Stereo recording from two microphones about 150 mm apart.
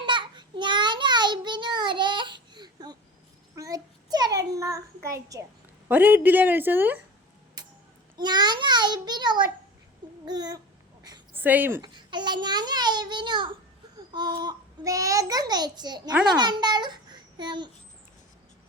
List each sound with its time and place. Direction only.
0.0 s child singing: 30° right (ahead or behind)
3.5 s a sound: 25° right (ahead or behind)
4.5 s child singing: 20° right (ahead or behind)
5.9 s a woman's voice: 10° right (ahead or behind)
7.6 s music: 25° right (ahead or behind)
8.2 s a child's voice: 30° right (ahead or behind)
11.3 s speech: 10° right (ahead or behind)
11.8 s a child's voice: 30° right (ahead or behind)